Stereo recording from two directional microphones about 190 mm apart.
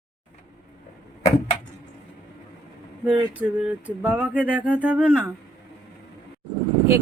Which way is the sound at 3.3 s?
10° right (ahead or behind).